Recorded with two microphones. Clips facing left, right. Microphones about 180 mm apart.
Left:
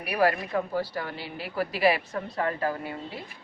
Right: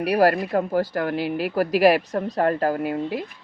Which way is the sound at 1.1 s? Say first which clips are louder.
Right 14 dB; 90° right.